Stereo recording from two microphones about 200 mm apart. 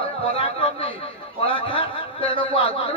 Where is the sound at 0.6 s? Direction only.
25° left (ahead or behind).